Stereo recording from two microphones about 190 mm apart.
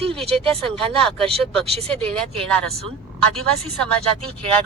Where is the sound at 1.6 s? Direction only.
30° right (ahead or behind).